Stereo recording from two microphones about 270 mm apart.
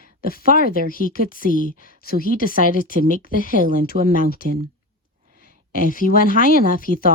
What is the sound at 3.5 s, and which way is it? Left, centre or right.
Speech, right.